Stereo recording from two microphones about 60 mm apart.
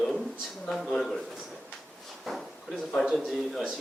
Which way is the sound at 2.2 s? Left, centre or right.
Centre.